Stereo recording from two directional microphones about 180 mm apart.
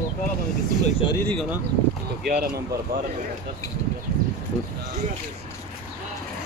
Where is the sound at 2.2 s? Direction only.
55° right (ahead or behind).